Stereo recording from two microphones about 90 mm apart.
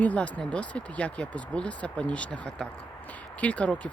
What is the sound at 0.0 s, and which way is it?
Speech, 15° left (ahead or behind).